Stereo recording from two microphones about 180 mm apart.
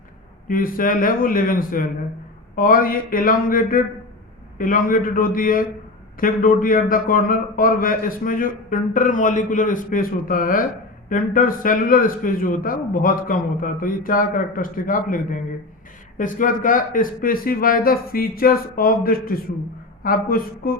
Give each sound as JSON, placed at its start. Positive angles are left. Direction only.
{"t": 0.4, "sound": "a man's voice", "side_deg": 50}